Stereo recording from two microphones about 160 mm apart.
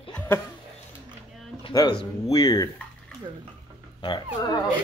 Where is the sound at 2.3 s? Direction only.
25° left (ahead or behind).